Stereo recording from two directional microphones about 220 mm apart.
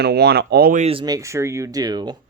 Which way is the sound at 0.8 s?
20° right (ahead or behind).